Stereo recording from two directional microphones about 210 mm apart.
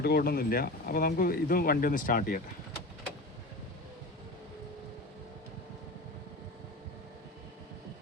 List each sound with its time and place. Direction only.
0.0 s speech: 45° left (ahead or behind)